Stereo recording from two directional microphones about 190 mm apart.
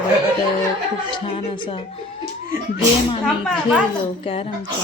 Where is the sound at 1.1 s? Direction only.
30° left (ahead or behind).